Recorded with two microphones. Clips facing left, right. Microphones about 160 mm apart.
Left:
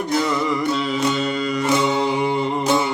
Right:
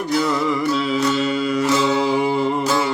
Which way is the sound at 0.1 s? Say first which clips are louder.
Right 2 dB; centre (ahead or behind).